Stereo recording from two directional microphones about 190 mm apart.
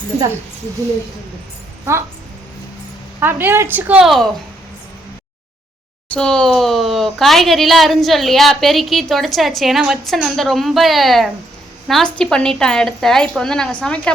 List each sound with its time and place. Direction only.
0.1 s speech: 35° right (ahead or behind)
3.2 s a woman's voice: 10° right (ahead or behind)
6.1 s speech: 5° left (ahead or behind)